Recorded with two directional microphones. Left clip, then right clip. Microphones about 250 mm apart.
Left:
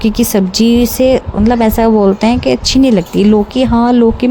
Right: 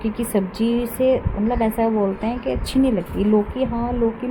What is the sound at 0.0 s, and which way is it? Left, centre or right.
A woman's voice, left.